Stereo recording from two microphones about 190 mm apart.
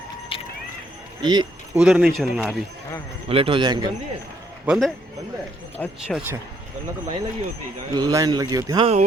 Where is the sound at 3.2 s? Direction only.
30° right (ahead or behind).